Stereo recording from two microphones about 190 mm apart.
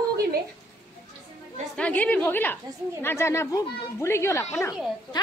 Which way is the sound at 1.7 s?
5° left (ahead or behind).